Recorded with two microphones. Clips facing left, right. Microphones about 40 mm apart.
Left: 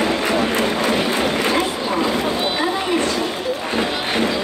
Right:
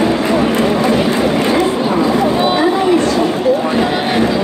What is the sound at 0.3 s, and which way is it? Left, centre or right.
Run, right.